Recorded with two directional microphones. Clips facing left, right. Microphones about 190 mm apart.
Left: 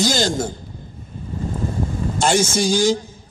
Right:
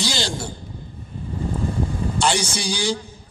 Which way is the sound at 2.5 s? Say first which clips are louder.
Left 7 dB; 45° left (ahead or behind).